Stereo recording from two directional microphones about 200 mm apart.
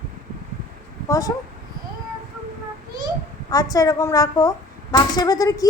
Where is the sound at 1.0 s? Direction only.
15° left (ahead or behind).